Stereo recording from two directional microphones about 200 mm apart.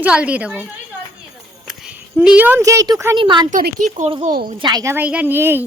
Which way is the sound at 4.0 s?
35° right (ahead or behind).